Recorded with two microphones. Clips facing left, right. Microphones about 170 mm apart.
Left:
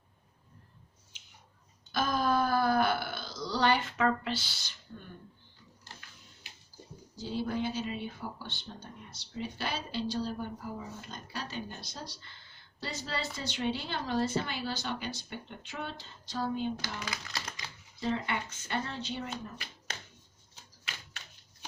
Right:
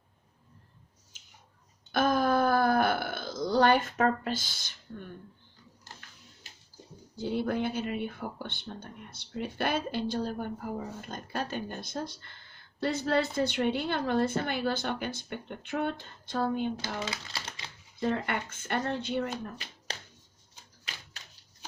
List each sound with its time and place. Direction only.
1.1 s a sound: 45° right (ahead or behind)
1.9 s burping: 55° right (ahead or behind)
7.2 s speech: 60° right (ahead or behind)
17.0 s speech: 30° right (ahead or behind)
18.0 s speech: 55° right (ahead or behind)
19.9 s a sound: 35° right (ahead or behind)